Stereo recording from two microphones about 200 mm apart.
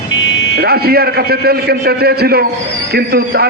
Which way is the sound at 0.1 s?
65° left (ahead or behind).